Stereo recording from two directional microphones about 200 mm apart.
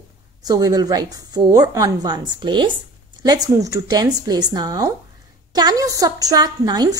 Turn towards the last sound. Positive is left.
turn(degrees=-20)  # may be behind; listen again after turning